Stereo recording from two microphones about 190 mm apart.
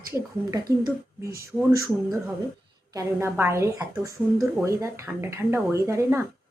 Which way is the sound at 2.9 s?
15° right (ahead or behind).